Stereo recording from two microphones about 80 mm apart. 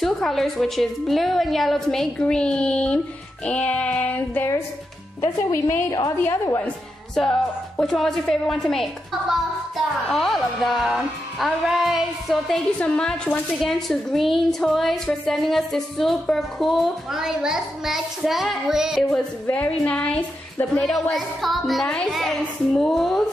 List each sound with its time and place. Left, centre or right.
0.0 s a woman's voice: centre
3.4 s child singing: centre
5.2 s speech: left
5.9 s a woman's voice: left
6.2 s speech: left
7.2 s a woman's voice: centre
10.0 s a woman's voice: centre
12.7 s a woman's voice: centre
19.5 s child singing: centre
20.9 s a woman's voice: centre